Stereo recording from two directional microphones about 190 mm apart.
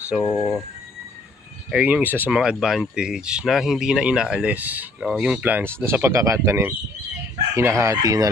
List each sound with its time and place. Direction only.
0.1 s speech: 5° right (ahead or behind)
1.7 s speech: 5° right (ahead or behind)